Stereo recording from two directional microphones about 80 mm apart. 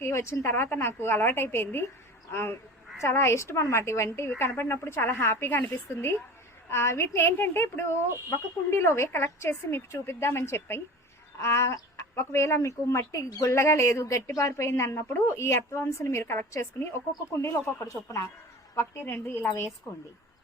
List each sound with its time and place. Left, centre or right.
0.0 s a woman's voice: left